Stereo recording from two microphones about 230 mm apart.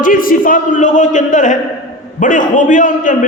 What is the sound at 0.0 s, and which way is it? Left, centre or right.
A man's voice, left.